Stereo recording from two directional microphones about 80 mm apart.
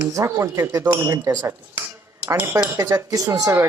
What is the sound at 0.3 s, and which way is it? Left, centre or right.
Speech, right.